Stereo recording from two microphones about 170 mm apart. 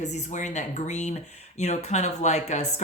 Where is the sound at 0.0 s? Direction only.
45° left (ahead or behind).